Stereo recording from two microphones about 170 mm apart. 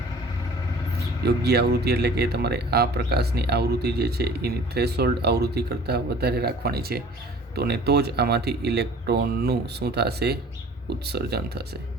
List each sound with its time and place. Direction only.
1.2 s speech: 75° right (ahead or behind)